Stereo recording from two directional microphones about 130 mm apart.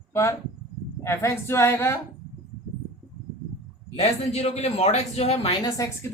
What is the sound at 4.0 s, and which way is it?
A man's voice, 55° left (ahead or behind).